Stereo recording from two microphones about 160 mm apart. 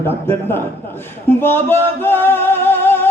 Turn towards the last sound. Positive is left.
turn(degrees=15)  # may be behind; listen again after turning